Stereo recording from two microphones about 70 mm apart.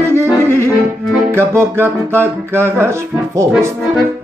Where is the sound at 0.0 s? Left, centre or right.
Right.